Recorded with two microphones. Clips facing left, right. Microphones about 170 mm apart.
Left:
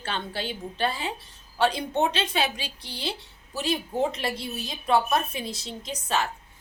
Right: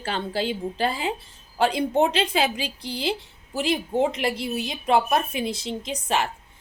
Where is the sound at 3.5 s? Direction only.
25° right (ahead or behind).